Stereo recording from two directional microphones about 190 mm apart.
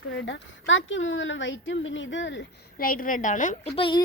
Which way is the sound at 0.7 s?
85° left.